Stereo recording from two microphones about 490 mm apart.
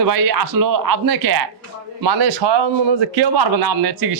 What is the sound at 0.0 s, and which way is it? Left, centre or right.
Speech, right.